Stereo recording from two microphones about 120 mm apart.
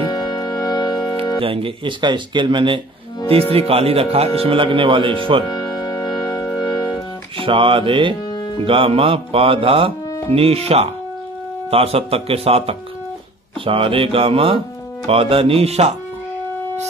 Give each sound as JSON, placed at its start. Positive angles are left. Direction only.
{"t": 0.1, "sound": "music", "side_deg": 35}
{"t": 1.4, "sound": "speech", "side_deg": -50}
{"t": 3.5, "sound": "speech", "side_deg": -55}
{"t": 5.5, "sound": "music", "side_deg": 35}
{"t": 7.3, "sound": "speech", "side_deg": -45}